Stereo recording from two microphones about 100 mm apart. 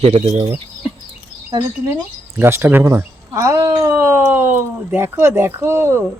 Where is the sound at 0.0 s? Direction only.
85° right.